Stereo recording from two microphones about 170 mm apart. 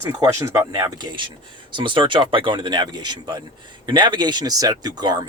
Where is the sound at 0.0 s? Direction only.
20° right (ahead or behind).